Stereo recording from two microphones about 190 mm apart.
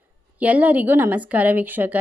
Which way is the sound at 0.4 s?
10° right (ahead or behind).